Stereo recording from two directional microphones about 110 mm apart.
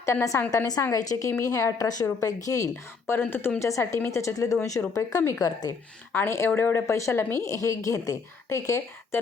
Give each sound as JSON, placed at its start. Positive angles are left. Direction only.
{"t": 0.0, "sound": "a woman's voice", "side_deg": 25}
{"t": 3.1, "sound": "a woman's voice", "side_deg": 20}